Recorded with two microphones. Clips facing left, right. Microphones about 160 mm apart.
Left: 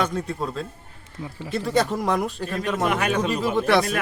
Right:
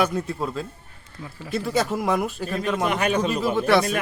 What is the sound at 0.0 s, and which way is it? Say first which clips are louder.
Speech: right 2 dB; 5° right (ahead or behind).